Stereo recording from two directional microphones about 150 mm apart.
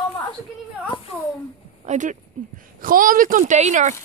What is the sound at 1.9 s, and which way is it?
Speech, 55° right (ahead or behind).